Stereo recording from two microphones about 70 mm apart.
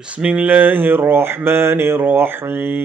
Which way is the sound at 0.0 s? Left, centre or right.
Centre.